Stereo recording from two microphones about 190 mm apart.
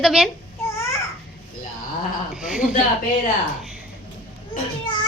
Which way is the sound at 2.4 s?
5° right (ahead or behind).